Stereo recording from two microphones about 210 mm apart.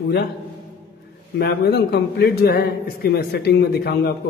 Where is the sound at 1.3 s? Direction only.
50° left (ahead or behind).